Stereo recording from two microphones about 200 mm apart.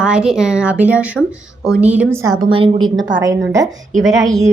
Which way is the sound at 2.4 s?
25° right (ahead or behind).